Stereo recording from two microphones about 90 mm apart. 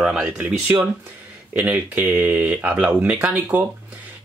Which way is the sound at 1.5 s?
20° right (ahead or behind).